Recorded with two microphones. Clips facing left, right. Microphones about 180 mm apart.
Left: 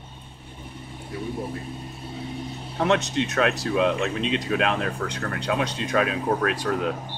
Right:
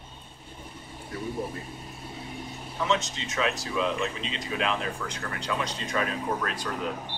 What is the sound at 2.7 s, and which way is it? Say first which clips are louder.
Speech: left 6 dB; 65° left (ahead or behind).